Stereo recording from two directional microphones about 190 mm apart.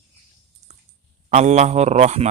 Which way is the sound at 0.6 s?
35° right (ahead or behind).